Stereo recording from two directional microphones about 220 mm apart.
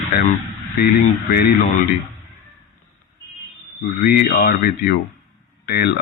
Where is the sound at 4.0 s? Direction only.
45° left (ahead or behind).